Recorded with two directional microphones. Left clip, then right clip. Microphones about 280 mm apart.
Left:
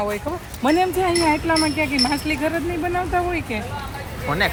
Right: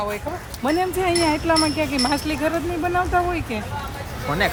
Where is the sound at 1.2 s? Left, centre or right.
Centre.